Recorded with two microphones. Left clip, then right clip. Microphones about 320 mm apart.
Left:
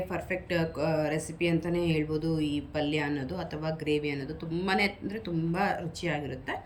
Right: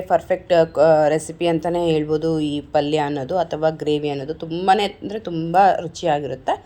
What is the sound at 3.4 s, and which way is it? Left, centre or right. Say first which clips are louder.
Speech: right 14 dB; right.